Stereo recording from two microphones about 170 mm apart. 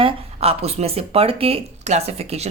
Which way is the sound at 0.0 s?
35° right (ahead or behind).